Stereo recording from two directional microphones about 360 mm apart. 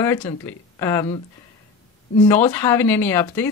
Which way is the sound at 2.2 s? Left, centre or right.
Centre.